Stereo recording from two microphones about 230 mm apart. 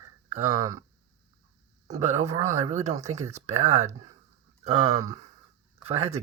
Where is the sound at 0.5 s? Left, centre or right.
Centre.